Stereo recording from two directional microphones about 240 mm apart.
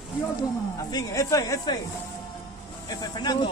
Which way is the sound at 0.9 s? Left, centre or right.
Centre.